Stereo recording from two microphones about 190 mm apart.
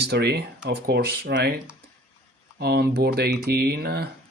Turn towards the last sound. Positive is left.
turn(degrees=-55)  # may be behind; listen again after turning